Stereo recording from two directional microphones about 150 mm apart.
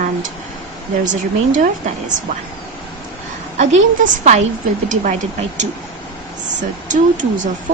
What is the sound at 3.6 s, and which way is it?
A woman's voice, 55° right (ahead or behind).